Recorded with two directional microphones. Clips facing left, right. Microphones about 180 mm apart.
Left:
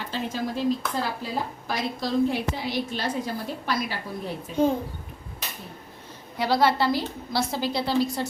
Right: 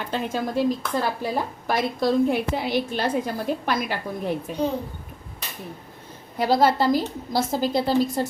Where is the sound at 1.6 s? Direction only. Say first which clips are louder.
Right 6 dB; 55° right (ahead or behind).